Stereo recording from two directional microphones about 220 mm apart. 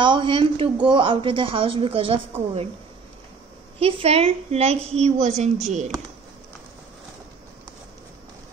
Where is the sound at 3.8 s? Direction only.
25° right (ahead or behind).